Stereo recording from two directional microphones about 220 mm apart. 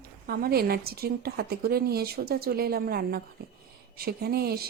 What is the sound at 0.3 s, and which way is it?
Speech, 45° right (ahead or behind).